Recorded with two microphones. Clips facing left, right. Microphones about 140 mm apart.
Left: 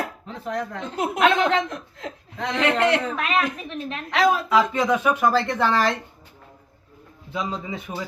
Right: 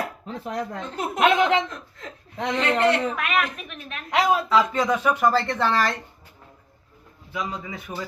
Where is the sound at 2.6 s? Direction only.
80° left.